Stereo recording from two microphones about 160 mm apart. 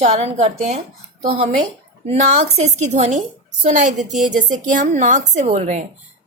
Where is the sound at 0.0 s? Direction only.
40° right (ahead or behind).